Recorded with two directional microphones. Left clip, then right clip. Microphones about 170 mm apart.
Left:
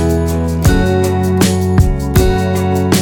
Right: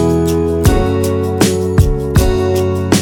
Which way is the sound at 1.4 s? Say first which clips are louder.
Right 1 dB; centre (ahead or behind).